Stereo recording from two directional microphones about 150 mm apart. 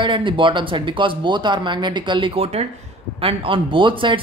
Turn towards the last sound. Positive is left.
turn(degrees=-35)  # may be behind; listen again after turning